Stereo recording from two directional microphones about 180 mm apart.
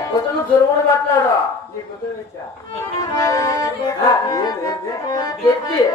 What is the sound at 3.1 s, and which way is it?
Speech, 15° left (ahead or behind).